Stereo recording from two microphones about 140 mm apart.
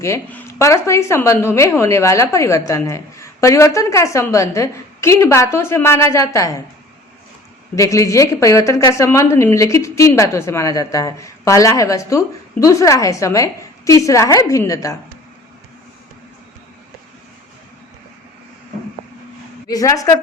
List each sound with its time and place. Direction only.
0.0 s a woman's voice: 15° left (ahead or behind)
7.8 s a woman's voice: 20° left (ahead or behind)
19.6 s a woman's voice: 25° left (ahead or behind)